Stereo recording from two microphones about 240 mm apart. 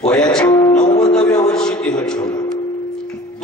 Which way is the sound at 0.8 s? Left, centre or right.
Centre.